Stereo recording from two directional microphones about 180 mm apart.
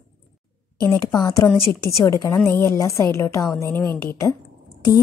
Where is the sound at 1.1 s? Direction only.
15° left (ahead or behind).